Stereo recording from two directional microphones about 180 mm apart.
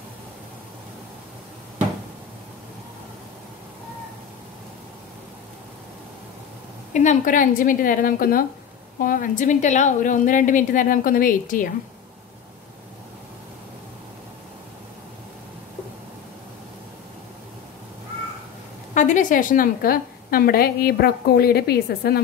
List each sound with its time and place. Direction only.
6.9 s a woman's voice: 40° left (ahead or behind)
18.9 s a woman's voice: 45° left (ahead or behind)